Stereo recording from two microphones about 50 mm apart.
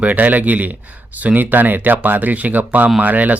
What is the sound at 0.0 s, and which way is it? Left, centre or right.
Speech, right.